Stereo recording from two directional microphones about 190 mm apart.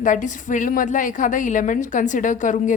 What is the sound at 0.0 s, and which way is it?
A woman's voice, 45° left (ahead or behind).